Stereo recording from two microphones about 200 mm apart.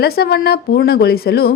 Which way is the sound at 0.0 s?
50° left (ahead or behind).